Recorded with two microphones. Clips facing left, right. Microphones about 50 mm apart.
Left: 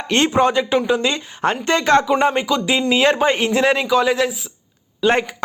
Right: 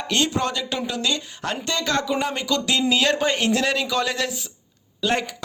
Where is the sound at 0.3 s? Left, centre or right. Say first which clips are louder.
Left 9 dB; left.